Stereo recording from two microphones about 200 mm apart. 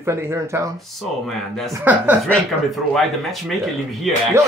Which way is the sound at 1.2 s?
Centre (ahead or behind).